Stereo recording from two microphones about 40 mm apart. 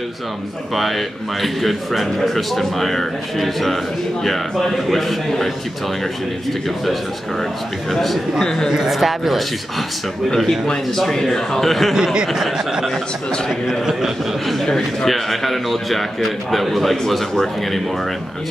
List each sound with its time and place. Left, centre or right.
0.7 s speech: centre
7.9 s speech: centre
11.0 s speech: centre
11.9 s speech: centre
12.3 s speech: centre
13.8 s speech: centre
14.6 s speech: centre